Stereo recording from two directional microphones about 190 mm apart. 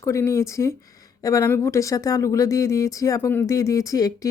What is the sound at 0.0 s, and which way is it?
Speech, 15° left (ahead or behind).